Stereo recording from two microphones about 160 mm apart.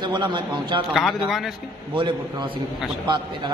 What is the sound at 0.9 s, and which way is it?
Speech, centre (ahead or behind).